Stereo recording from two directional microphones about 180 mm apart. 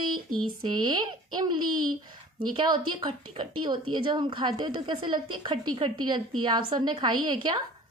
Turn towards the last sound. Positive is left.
turn(degrees=-25)  # may be behind; listen again after turning